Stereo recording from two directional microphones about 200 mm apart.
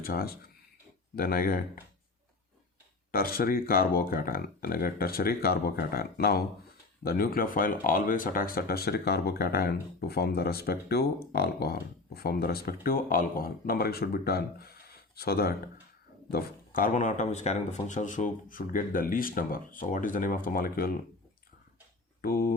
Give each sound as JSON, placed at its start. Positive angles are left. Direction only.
{"t": 0.0, "sound": "speech", "side_deg": 45}
{"t": 3.1, "sound": "speech", "side_deg": 45}
{"t": 22.2, "sound": "speech", "side_deg": 50}